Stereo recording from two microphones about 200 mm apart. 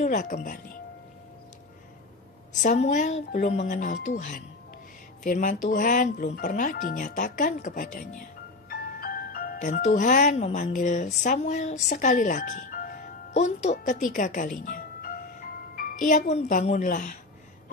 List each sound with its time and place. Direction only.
0.0 s speech: 40° left (ahead or behind)
2.6 s speech: 35° left (ahead or behind)
5.2 s speech: 40° left (ahead or behind)